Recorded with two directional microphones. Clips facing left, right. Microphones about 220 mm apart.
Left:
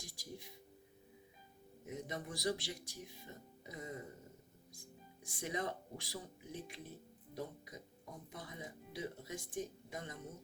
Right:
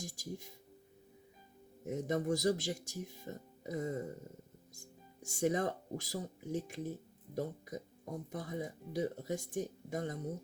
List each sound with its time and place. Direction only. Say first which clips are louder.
0.0 s speech: right 7 dB; 45° right (ahead or behind)
1.8 s speech: right 10 dB; 45° right (ahead or behind)